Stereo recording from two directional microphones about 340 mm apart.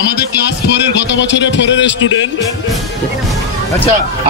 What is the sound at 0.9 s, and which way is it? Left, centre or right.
A man's voice, left.